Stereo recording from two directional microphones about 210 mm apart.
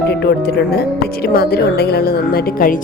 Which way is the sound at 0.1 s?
50° left (ahead or behind).